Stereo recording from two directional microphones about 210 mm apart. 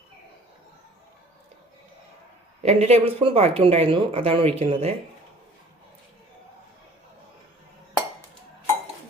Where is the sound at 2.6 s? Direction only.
30° right (ahead or behind).